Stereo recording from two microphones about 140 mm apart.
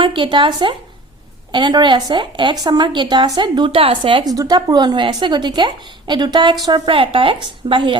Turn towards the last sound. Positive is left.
turn(degrees=-35)  # may be behind; listen again after turning